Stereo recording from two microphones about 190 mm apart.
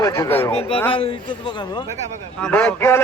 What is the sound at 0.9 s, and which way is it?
Speech, 30° left (ahead or behind).